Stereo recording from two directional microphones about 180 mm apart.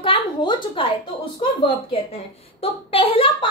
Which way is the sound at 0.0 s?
25° left (ahead or behind).